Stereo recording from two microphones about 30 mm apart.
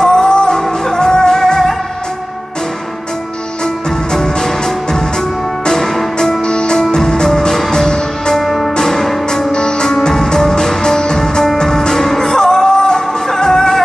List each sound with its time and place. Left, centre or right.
0.0 s music: left
4.1 s music: centre
6.4 s music: left
6.8 s music: centre
8.4 s music: centre
8.7 s music: left
9.5 s music: left